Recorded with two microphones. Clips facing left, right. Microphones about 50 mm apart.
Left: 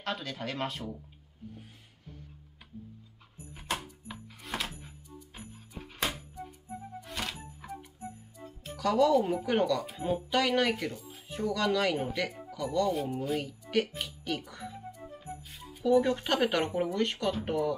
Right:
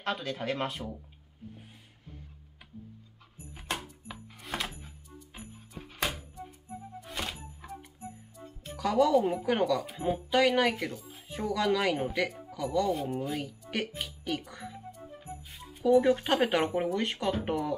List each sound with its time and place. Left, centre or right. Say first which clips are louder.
0.0 s speech: right 3 dB; centre
3.5 s door: left 1 dB; centre
5.7 s a sound: even; centre
7.0 s music: right 1 dB; centre
8.7 s speech: even; centre